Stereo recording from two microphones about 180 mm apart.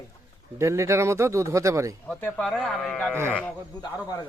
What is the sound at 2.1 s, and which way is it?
A man's voice, 10° left (ahead or behind).